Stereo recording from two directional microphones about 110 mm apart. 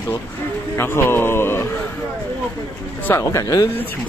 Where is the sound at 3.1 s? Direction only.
25° left (ahead or behind).